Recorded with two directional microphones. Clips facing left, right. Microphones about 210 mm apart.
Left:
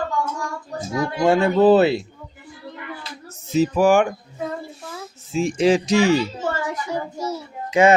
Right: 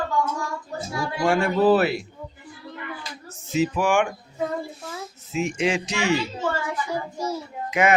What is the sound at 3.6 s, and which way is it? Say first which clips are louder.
Speech: left 5 dB; 40° left (ahead or behind).